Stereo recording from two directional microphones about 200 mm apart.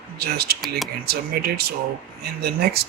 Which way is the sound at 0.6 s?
Centre (ahead or behind).